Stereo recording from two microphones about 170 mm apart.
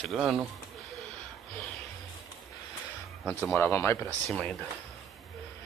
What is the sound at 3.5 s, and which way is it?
Speech, 15° left (ahead or behind).